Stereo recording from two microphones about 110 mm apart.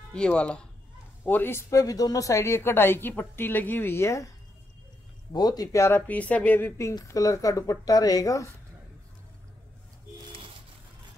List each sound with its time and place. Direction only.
0.1 s speech: 10° left (ahead or behind)
1.2 s speech: 20° left (ahead or behind)
5.3 s speech: 35° left (ahead or behind)